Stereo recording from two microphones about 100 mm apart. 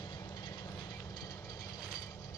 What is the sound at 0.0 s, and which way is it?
Train, 40° left (ahead or behind).